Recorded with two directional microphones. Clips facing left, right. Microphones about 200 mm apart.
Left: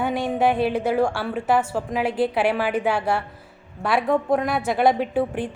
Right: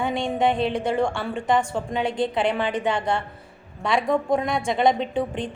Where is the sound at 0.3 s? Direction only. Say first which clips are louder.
Left 2 dB; 5° left (ahead or behind).